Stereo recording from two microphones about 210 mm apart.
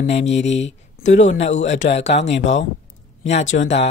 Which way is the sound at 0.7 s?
35° left (ahead or behind).